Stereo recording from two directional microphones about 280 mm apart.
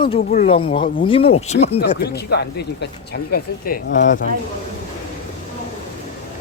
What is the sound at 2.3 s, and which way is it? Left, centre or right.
Speech, left.